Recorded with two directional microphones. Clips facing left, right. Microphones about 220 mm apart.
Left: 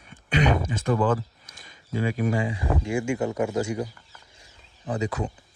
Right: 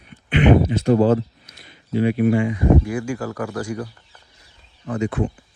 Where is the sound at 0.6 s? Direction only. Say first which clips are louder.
Right 8 dB; 40° right (ahead or behind).